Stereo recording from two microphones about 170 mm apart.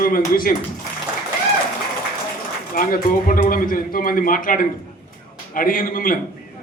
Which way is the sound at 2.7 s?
55° left (ahead or behind).